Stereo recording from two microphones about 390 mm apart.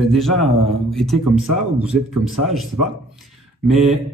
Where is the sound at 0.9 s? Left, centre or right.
Centre.